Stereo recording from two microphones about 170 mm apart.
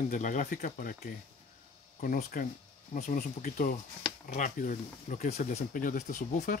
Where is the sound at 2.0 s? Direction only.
55° left (ahead or behind).